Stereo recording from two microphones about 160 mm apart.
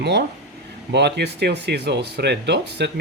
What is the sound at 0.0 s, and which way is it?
Speech, 90° right.